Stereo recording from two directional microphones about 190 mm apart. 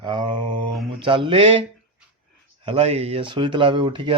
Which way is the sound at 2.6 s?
30° right (ahead or behind).